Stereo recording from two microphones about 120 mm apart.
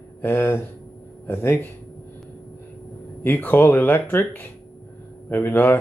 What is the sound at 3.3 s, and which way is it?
Speech, 15° left (ahead or behind).